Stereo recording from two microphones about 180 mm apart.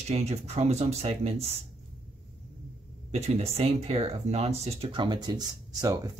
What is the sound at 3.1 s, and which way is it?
Speech, 35° right (ahead or behind).